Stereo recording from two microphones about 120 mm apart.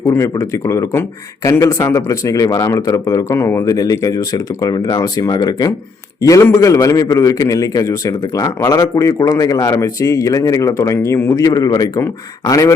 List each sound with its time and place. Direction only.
0.0 s speech: 25° left (ahead or behind)
6.7 s speech: 35° left (ahead or behind)